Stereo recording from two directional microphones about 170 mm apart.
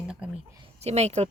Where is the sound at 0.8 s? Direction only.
40° right (ahead or behind).